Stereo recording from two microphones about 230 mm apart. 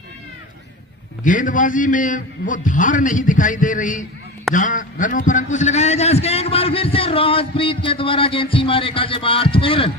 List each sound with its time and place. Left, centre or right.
1.2 s a man's voice: left